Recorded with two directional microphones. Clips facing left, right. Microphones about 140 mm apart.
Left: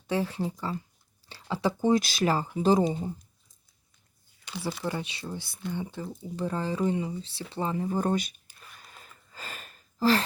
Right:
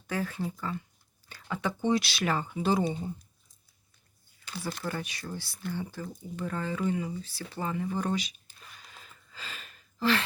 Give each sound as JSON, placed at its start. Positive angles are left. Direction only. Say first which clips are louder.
{"t": 0.1, "sound": "speech", "louder": "left 4 dB", "side_deg": 25}
{"t": 4.8, "sound": "speech", "louder": "left 3 dB", "side_deg": 20}
{"t": 8.8, "sound": "a sound", "louder": "left 1 dB", "side_deg": 45}